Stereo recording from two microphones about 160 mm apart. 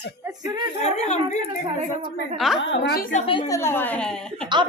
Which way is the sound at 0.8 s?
45° left (ahead or behind).